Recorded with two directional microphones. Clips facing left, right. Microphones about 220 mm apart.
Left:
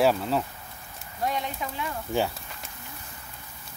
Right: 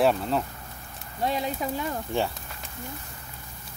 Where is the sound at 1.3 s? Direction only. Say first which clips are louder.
Right 3 dB; 35° right (ahead or behind).